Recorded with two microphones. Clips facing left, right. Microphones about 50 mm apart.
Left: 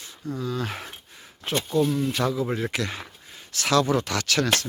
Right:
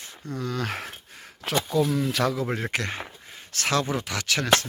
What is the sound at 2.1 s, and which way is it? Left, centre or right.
Speech, right.